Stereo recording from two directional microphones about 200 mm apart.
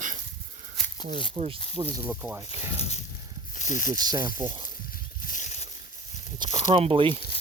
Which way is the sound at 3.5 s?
40° left (ahead or behind).